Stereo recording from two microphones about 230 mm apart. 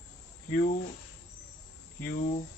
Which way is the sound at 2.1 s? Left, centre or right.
Left.